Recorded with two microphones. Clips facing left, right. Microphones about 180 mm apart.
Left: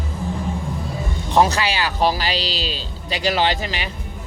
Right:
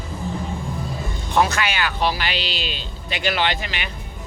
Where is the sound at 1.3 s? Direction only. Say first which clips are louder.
Left 3 dB; 35° left (ahead or behind).